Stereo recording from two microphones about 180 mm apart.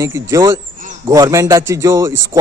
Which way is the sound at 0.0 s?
15° right (ahead or behind).